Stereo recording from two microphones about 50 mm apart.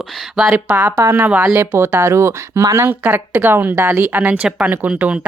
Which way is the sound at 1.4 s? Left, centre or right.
Right.